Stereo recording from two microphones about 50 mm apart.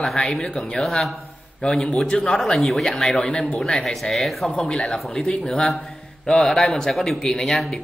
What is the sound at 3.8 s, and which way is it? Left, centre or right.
A man's voice, centre.